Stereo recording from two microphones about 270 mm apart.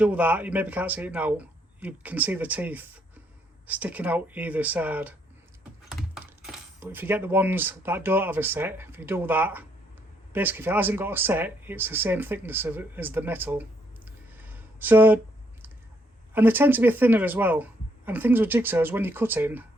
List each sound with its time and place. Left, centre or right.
0.0 s speech: centre
16.3 s speech: centre